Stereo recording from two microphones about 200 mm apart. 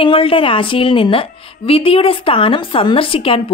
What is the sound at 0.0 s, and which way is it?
A woman's voice, 25° left (ahead or behind).